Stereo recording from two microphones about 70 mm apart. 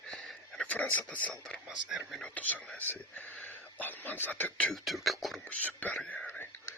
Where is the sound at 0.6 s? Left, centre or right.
Left.